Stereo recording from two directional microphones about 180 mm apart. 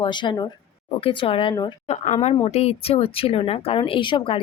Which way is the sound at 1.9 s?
40° left (ahead or behind).